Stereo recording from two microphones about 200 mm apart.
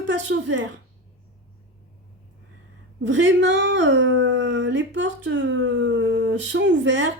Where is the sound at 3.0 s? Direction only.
65° right (ahead or behind).